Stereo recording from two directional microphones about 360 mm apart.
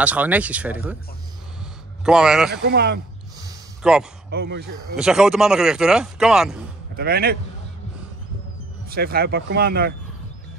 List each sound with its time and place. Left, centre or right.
0.0 s speech: centre
2.0 s speech: centre
2.5 s speech: right
3.3 s a sound: centre
4.3 s speech: right
4.9 s speech: centre
7.0 s speech: right
8.9 s speech: right